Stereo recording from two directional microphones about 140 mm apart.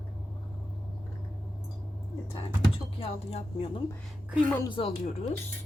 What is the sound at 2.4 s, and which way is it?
Speech, 45° left (ahead or behind).